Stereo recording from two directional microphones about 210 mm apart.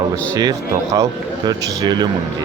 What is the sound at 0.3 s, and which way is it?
A man's voice, 15° right (ahead or behind).